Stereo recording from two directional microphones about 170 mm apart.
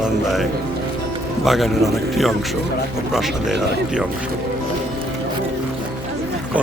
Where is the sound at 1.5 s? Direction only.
Centre (ahead or behind).